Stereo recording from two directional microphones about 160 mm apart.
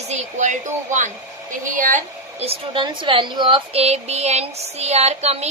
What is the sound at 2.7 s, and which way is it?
A woman's voice, 30° right (ahead or behind).